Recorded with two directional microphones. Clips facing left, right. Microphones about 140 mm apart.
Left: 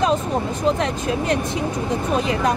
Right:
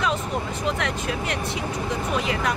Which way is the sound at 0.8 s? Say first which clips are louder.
Left 5 dB; 25° left (ahead or behind).